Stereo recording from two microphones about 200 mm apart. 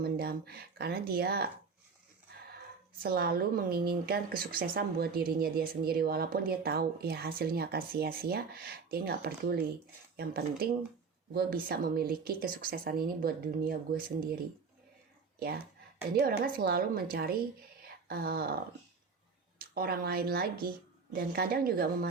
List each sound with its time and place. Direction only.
0.0 s a woman's voice: 50° right (ahead or behind)
3.0 s a woman's voice: 50° right (ahead or behind)
16.2 s a woman's voice: 50° right (ahead or behind)